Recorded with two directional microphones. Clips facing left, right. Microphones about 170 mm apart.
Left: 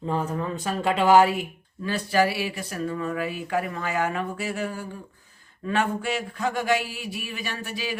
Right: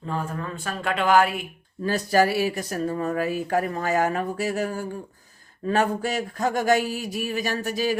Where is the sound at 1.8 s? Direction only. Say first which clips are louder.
Right 2 dB; 40° right (ahead or behind).